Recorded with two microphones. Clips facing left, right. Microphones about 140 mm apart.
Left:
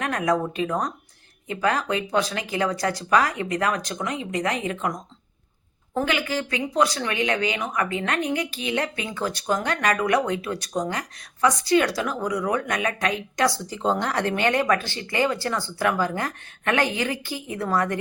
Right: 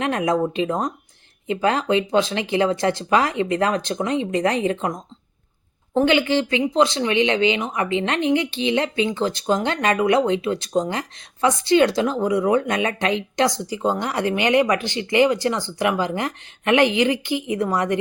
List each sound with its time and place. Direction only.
0.0 s speech: 25° right (ahead or behind)